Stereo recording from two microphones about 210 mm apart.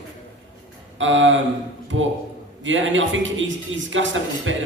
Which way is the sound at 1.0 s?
65° right (ahead or behind).